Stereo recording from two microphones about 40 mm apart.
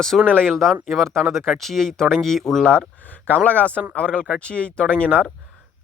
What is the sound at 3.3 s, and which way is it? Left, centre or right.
Speech, left.